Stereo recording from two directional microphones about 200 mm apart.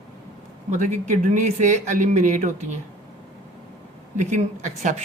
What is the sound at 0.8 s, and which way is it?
Speech, 40° right (ahead or behind).